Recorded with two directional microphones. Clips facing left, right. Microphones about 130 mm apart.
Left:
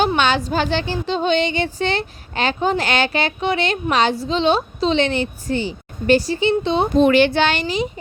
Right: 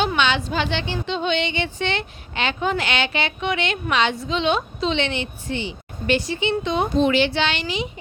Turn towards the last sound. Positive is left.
turn(degrees=40)  # may be behind; listen again after turning